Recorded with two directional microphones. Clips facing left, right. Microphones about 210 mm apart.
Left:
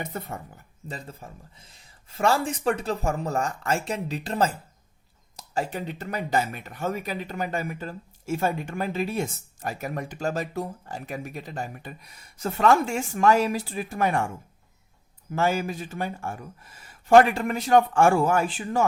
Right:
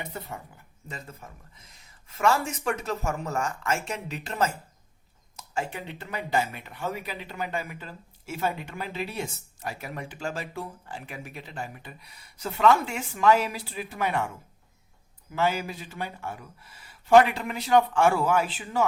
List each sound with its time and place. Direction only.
0.0 s speech: 45° left (ahead or behind)
15.3 s speech: 45° left (ahead or behind)